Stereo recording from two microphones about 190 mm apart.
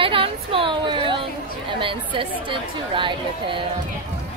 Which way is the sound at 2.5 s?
25° right (ahead or behind).